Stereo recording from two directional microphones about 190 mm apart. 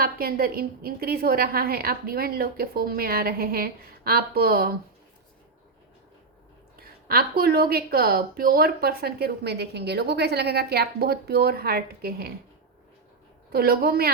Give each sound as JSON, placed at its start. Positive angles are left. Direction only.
{"t": 0.0, "sound": "a woman's voice", "side_deg": -50}
{"t": 6.7, "sound": "a woman's voice", "side_deg": -55}
{"t": 13.5, "sound": "a woman's voice", "side_deg": -55}